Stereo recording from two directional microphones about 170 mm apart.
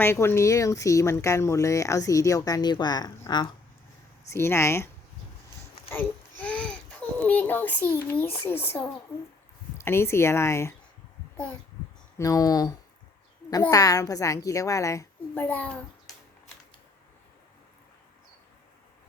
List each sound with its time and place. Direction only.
0.0 s speech: 15° left (ahead or behind)
4.3 s speech: 15° left (ahead or behind)
5.9 s a sound: 10° left (ahead or behind)
7.3 s speech: 10° left (ahead or behind)
12.1 s speech: 20° left (ahead or behind)